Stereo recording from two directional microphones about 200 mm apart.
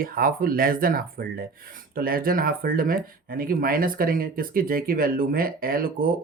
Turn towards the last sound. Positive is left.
turn(degrees=-45)  # may be behind; listen again after turning